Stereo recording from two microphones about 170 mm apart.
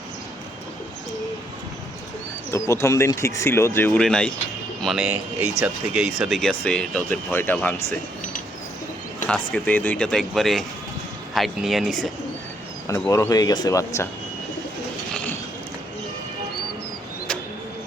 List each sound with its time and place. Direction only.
2.5 s speech: 15° left (ahead or behind)
9.2 s speech: 10° left (ahead or behind)
12.9 s speech: 20° left (ahead or behind)
15.1 s a sound: 10° left (ahead or behind)